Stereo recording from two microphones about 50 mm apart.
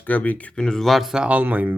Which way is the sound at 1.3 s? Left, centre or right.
Right.